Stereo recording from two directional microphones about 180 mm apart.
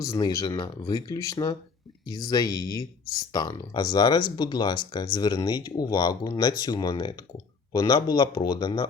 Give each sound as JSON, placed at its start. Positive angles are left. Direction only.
{"t": 0.0, "sound": "speech", "side_deg": 20}